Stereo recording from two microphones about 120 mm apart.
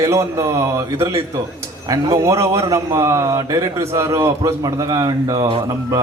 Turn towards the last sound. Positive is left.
turn(degrees=-30)  # may be behind; listen again after turning